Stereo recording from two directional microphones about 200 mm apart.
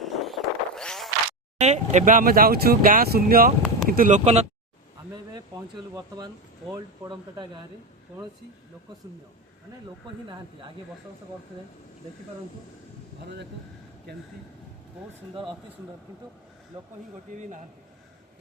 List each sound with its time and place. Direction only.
0.0 s vehicle: centre (ahead or behind)
1.5 s speech: 35° right (ahead or behind)
5.9 s speech: 15° right (ahead or behind)
13.2 s speech: 60° right (ahead or behind)